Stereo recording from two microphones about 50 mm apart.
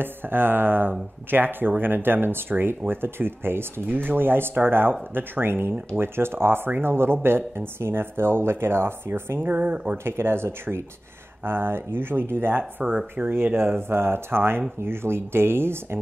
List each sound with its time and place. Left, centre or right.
0.0 s speech: right
10.0 s speech: right